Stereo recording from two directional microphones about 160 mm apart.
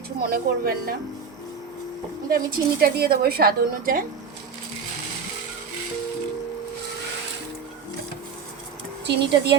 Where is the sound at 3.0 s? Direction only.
70° right (ahead or behind).